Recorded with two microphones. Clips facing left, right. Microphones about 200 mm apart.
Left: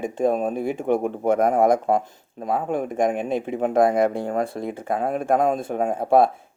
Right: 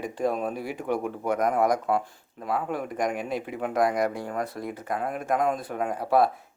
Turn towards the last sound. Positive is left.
turn(degrees=25)  # may be behind; listen again after turning